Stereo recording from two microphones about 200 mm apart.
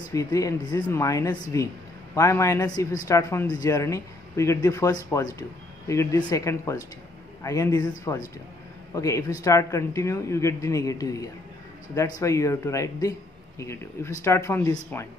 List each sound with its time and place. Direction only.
0.1 s a man's voice: 15° left (ahead or behind)